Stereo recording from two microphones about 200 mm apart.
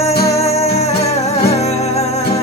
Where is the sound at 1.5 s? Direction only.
35° left (ahead or behind).